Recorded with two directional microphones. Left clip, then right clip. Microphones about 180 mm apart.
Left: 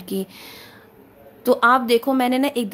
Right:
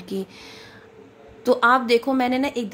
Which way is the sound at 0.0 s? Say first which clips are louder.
Left 2 dB; 20° left (ahead or behind).